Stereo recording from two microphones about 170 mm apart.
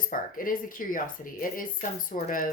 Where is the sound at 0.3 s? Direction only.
55° left (ahead or behind).